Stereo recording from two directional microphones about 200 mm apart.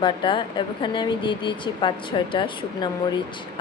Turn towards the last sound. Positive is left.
turn(degrees=25)  # may be behind; listen again after turning